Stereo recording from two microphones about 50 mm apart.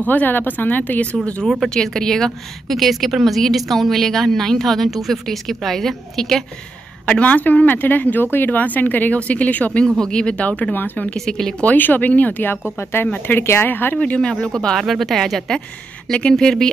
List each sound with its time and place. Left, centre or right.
0.0 s speech: left
1.1 s speech: left
1.7 s a woman's voice: centre
7.1 s speech: left
9.8 s speech: centre
10.7 s speech: left
11.1 s speech: centre
11.6 s speech: left
12.7 s speech: left
13.7 s speech: left
13.9 s speech: left
14.8 s a woman's voice: centre
16.1 s speech: left